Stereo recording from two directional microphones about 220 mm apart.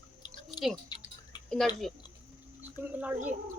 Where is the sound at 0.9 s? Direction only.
20° left (ahead or behind).